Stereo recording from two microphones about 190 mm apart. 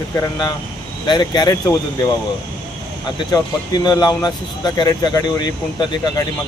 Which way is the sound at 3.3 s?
20° left (ahead or behind).